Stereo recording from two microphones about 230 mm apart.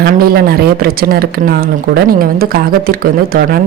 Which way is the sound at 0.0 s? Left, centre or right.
Right.